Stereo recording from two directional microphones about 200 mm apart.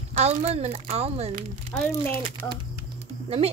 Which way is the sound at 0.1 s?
35° right (ahead or behind).